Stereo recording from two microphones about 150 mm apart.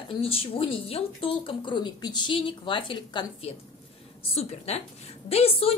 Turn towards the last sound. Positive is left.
turn(degrees=40)  # may be behind; listen again after turning